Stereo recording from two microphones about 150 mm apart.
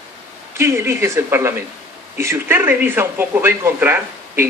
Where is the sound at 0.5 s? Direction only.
15° right (ahead or behind).